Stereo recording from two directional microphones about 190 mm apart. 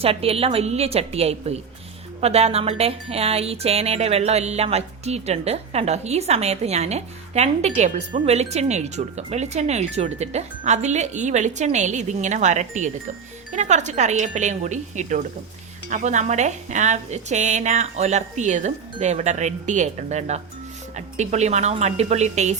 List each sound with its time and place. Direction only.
0.0 s music: 30° right (ahead or behind)